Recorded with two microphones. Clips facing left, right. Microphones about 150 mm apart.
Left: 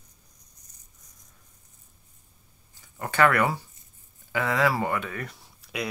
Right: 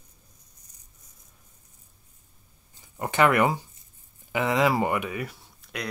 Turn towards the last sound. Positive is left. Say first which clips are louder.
# left 2 dB
turn(degrees=0)  # may be behind; listen again after turning